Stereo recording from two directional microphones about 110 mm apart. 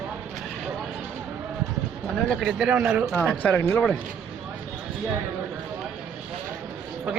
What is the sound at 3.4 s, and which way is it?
Speech, 20° left (ahead or behind).